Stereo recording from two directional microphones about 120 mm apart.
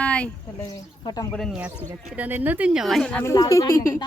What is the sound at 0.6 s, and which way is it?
Speech, 30° left (ahead or behind).